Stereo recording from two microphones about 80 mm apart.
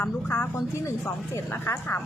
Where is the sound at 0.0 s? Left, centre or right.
Left.